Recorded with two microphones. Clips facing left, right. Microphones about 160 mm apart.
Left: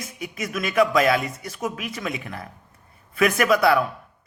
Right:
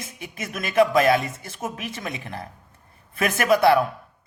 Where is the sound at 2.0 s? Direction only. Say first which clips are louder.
Left 2 dB; 35° right (ahead or behind).